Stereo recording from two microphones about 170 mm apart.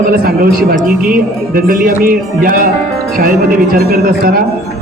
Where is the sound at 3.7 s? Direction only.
65° right (ahead or behind).